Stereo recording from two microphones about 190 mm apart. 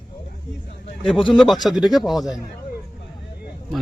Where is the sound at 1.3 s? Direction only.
Centre (ahead or behind).